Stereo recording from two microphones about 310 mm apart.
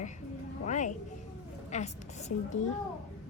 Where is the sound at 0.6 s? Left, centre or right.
Left.